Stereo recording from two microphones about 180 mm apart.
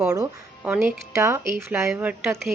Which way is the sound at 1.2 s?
15° right (ahead or behind).